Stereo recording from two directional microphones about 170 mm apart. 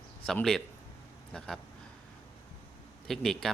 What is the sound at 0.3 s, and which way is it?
Speech, 5° left (ahead or behind).